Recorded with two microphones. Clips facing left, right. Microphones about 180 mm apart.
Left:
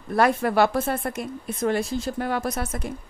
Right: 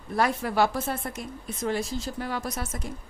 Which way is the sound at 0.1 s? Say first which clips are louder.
Left 5 dB; 60° left (ahead or behind).